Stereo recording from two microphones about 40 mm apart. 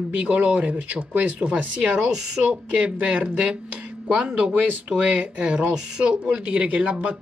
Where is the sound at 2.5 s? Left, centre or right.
Right.